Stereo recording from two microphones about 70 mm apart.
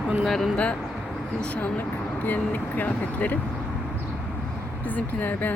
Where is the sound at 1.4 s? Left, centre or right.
Centre.